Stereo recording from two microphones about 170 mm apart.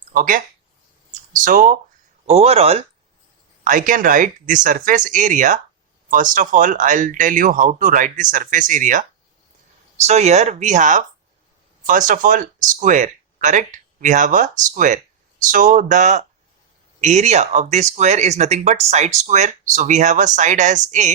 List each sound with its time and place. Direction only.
0.1 s speech: 55° right (ahead or behind)
2.2 s speech: 40° right (ahead or behind)
3.6 s speech: 50° right (ahead or behind)
10.1 s speech: 40° right (ahead or behind)